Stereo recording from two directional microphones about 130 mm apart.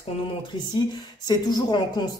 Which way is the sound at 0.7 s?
35° left (ahead or behind).